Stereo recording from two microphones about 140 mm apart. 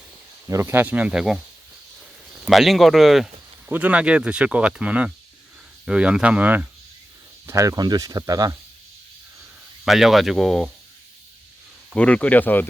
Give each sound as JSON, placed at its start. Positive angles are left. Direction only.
{"t": 0.4, "sound": "speech", "side_deg": -20}
{"t": 2.5, "sound": "speech", "side_deg": 0}
{"t": 7.4, "sound": "speech", "side_deg": -25}
{"t": 9.8, "sound": "speech", "side_deg": 0}
{"t": 11.9, "sound": "speech", "side_deg": 10}